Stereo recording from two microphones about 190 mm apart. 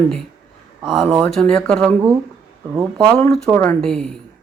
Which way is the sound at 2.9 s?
5° left (ahead or behind).